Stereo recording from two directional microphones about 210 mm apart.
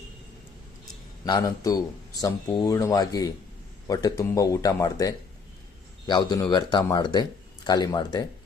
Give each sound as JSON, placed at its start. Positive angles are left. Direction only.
{"t": 1.2, "sound": "speech", "side_deg": 15}